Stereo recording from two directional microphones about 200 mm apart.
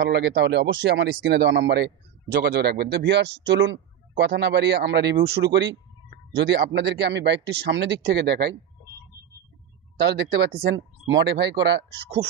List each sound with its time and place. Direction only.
0.0 s speech: 55° right (ahead or behind)
9.9 s speech: 55° right (ahead or behind)